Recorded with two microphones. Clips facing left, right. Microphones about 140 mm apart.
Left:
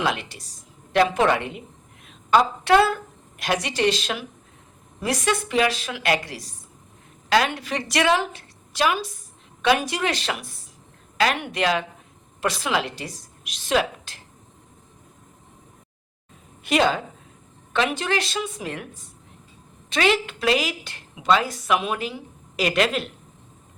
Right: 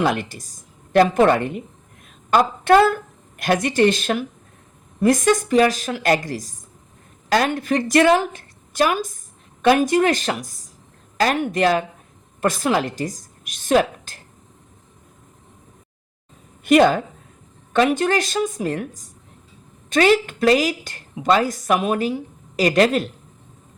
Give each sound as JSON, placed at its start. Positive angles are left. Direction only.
{"t": 0.0, "sound": "a woman's voice", "side_deg": -45}
{"t": 16.6, "sound": "a woman's voice", "side_deg": -50}